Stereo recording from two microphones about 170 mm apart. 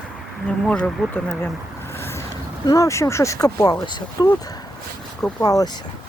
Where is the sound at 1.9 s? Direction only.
15° left (ahead or behind).